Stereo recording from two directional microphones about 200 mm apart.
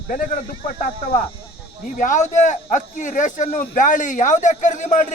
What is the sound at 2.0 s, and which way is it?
A man's voice, 40° left (ahead or behind).